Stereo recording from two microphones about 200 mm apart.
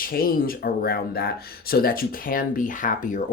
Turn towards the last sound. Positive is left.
turn(degrees=40)  # may be behind; listen again after turning